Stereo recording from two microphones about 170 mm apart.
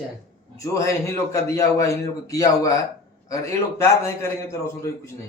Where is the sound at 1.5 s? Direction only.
20° left (ahead or behind).